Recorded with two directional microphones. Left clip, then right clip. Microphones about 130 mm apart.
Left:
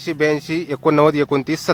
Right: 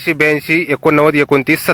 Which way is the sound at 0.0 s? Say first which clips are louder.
Right 6 dB; 25° right (ahead or behind).